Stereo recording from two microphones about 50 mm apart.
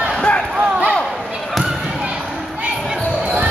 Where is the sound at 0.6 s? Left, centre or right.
Right.